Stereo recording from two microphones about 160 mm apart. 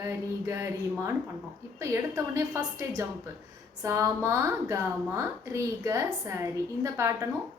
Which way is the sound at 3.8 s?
20° right (ahead or behind).